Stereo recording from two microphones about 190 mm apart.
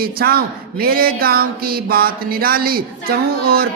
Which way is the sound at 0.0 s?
50° right (ahead or behind).